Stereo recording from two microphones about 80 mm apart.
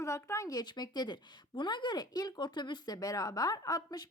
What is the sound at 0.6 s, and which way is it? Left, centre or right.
A woman's voice, left.